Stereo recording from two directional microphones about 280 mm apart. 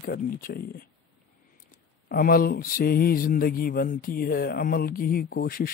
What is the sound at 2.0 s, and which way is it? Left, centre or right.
Mantra, left.